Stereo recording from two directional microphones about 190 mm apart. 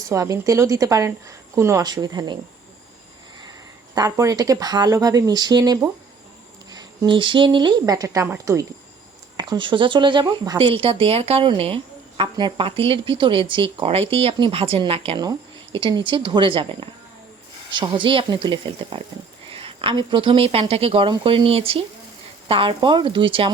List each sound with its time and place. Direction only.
0.1 s a woman's voice: 15° right (ahead or behind)
3.9 s speech: 20° right (ahead or behind)